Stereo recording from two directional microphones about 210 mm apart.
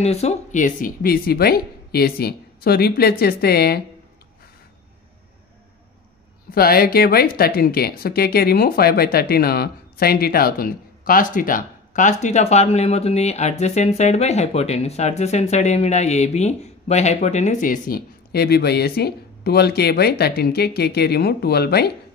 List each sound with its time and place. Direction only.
0.0 s speech: 30° left (ahead or behind); by 3.8 s 45° left (ahead or behind)
6.5 s speech: 45° left (ahead or behind)